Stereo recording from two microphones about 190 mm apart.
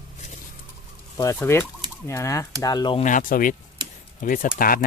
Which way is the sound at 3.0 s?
45° left (ahead or behind).